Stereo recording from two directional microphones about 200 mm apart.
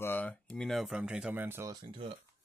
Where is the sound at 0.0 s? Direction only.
10° left (ahead or behind); by 1.8 s 10° right (ahead or behind).